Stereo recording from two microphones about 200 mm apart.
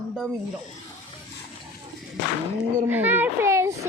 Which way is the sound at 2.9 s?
10° right (ahead or behind).